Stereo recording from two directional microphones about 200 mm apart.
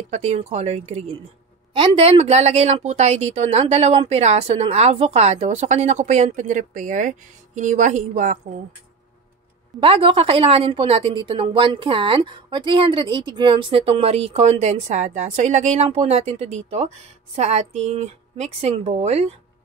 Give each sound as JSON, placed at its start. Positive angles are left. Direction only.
{"t": 0.1, "sound": "a woman's voice", "side_deg": -35}
{"t": 9.8, "sound": "a woman's voice", "side_deg": -25}